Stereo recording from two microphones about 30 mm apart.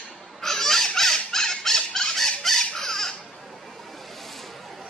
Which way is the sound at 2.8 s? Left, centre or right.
Centre.